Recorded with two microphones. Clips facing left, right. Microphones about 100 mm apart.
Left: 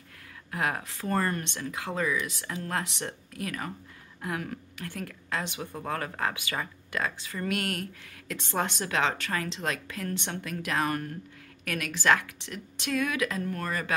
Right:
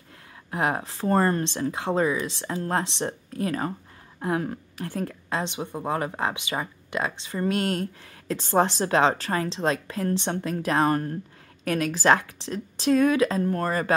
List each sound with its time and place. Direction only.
0.5 s a woman's voice: 25° right (ahead or behind)